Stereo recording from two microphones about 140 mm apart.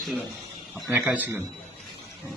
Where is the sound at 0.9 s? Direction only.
10° right (ahead or behind).